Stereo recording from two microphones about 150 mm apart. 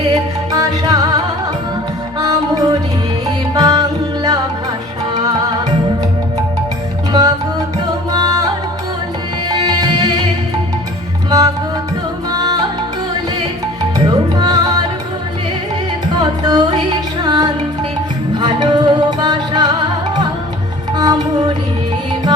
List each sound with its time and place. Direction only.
0.1 s music: 25° right (ahead or behind)
7.1 s music: 25° right (ahead or behind)
9.5 s music: 25° right (ahead or behind)
11.3 s music: 25° right (ahead or behind)
14.0 s music: 25° right (ahead or behind)
16.1 s music: 25° right (ahead or behind)